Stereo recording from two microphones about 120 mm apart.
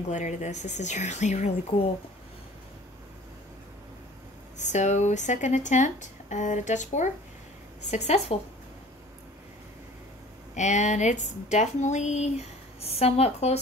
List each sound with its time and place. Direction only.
0.1 s speech: 85° left
4.6 s speech: 80° left
7.9 s a woman's voice: 70° left (ahead or behind)
10.5 s a woman's voice: 80° left; by 13.6 s 60° left (ahead or behind)